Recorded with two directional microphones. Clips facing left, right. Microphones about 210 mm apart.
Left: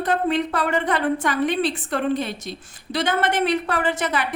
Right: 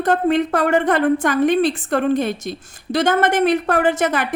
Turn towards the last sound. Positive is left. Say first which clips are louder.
# right 6 dB
turn(degrees=-45)  # may be behind; listen again after turning